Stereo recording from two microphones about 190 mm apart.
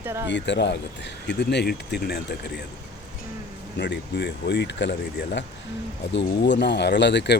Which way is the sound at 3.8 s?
65° left (ahead or behind).